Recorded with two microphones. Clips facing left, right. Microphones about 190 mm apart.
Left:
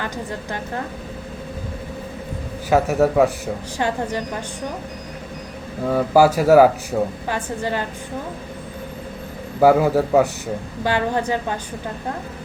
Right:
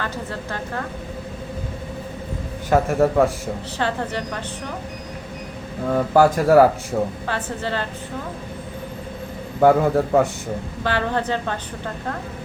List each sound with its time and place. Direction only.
0.0 s a woman's voice: 15° left (ahead or behind)
2.6 s speech: 5° left (ahead or behind)
3.8 s a woman's voice: 15° left (ahead or behind)
5.9 s speech: 5° left (ahead or behind)
7.3 s a woman's voice: 15° left (ahead or behind)
9.6 s a woman's voice: 5° left (ahead or behind)